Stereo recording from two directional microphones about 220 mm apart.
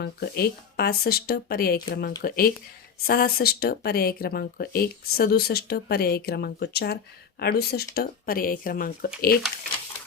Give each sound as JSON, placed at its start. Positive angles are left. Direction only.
{"t": 0.0, "sound": "speech", "side_deg": 45}